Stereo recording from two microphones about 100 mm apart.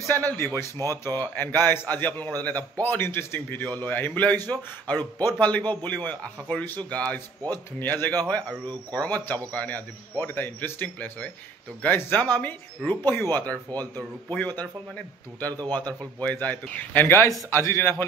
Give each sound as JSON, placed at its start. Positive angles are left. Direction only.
{"t": 0.1, "sound": "a man's voice", "side_deg": 20}
{"t": 13.7, "sound": "speech", "side_deg": -40}
{"t": 14.3, "sound": "speech", "side_deg": 15}
{"t": 15.7, "sound": "a man's voice", "side_deg": 15}